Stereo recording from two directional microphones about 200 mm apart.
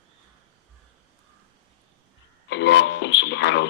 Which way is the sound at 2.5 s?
65° left (ahead or behind).